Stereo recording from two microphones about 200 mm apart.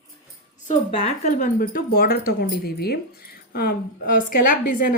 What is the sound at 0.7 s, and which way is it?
A woman's voice, 30° left (ahead or behind).